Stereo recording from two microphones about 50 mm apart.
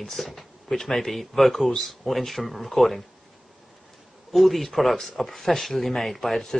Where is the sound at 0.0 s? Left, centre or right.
Centre.